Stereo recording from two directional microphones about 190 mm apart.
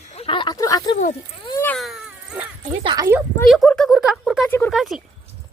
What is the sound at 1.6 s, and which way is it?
Cat, 5° left (ahead or behind).